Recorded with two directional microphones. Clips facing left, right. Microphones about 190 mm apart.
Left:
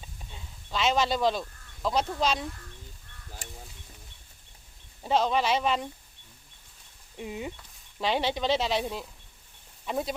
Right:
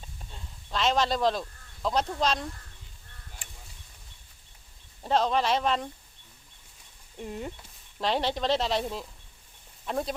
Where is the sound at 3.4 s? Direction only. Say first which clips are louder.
Left 7 dB; 40° left (ahead or behind).